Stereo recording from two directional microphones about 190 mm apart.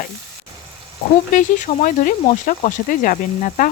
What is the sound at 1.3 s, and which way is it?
Speech, 40° left (ahead or behind).